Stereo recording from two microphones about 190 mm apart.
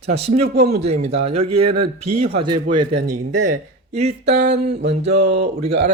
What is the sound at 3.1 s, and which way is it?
Speech, 40° right (ahead or behind).